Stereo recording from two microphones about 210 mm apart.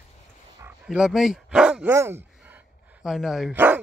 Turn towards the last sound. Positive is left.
turn(degrees=-5)  # may be behind; listen again after turning